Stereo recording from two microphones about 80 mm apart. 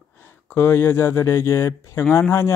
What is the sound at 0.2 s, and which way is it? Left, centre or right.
Speech, left.